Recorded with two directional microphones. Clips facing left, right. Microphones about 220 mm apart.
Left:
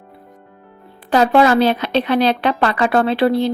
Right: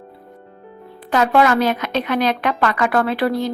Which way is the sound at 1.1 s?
30° left (ahead or behind).